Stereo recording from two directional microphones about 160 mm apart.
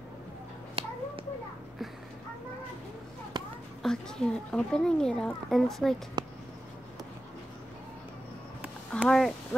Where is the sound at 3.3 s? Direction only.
30° right (ahead or behind).